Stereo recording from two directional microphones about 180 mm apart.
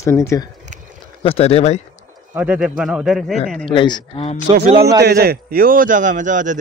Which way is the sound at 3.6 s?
25° left (ahead or behind).